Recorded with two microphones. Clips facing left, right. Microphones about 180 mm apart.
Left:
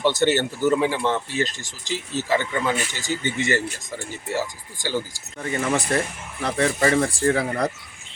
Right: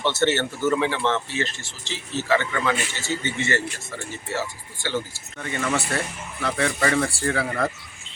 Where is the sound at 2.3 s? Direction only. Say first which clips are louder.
Even; 15° left (ahead or behind).